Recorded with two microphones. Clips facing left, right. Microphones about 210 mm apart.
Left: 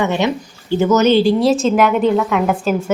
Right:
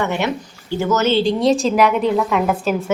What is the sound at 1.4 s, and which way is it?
A woman's voice, centre (ahead or behind).